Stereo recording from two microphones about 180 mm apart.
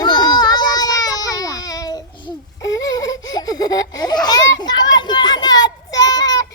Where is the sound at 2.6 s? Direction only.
20° left (ahead or behind).